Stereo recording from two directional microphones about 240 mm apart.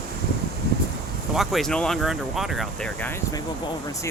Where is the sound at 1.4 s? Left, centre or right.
Centre.